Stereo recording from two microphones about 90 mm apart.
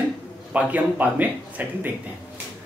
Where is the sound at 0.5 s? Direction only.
15° right (ahead or behind).